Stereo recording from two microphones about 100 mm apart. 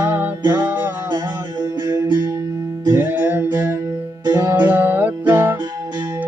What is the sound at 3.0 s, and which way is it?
Music, 20° right (ahead or behind).